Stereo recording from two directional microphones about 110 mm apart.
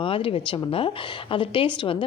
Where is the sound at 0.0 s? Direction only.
55° left (ahead or behind).